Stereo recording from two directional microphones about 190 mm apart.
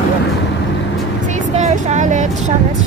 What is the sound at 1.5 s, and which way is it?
Speech, 40° right (ahead or behind).